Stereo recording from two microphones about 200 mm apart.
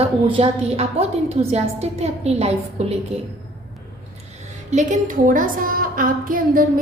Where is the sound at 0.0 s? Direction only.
30° right (ahead or behind).